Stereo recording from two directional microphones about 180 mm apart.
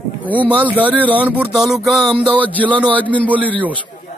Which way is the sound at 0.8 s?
10° right (ahead or behind).